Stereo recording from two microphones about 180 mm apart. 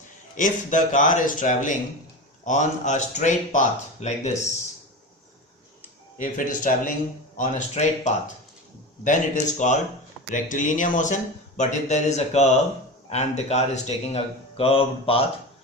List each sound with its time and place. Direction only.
0.3 s speech: 45° left (ahead or behind)
6.1 s speech: 45° left (ahead or behind); by 15.2 s 30° left (ahead or behind)